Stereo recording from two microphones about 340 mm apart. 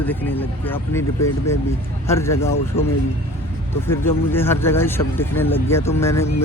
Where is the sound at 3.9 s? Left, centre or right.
Centre.